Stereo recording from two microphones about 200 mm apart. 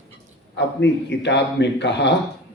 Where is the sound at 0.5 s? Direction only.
60° left (ahead or behind).